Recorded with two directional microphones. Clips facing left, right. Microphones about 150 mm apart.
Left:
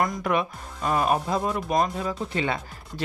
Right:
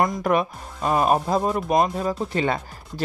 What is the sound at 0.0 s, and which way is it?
A woman's voice, 45° right (ahead or behind).